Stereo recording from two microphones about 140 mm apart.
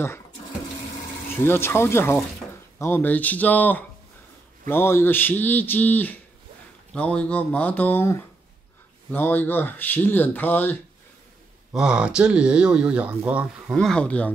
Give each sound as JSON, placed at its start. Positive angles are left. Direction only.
{"t": 1.3, "sound": "speech", "side_deg": 15}
{"t": 11.7, "sound": "speech", "side_deg": -5}
{"t": 13.7, "sound": "speech", "side_deg": 5}